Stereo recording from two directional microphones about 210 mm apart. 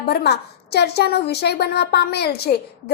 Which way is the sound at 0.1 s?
50° left (ahead or behind).